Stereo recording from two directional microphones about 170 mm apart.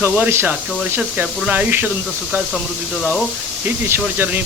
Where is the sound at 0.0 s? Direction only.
15° right (ahead or behind).